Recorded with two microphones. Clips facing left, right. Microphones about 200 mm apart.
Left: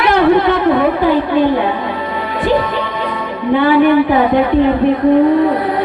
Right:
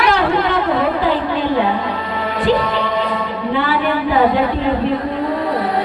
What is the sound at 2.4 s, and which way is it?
Music, 50° left (ahead or behind).